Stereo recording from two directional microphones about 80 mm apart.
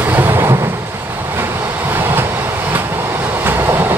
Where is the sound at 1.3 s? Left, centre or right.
Right.